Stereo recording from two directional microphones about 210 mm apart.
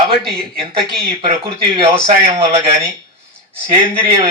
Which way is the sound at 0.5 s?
25° right (ahead or behind).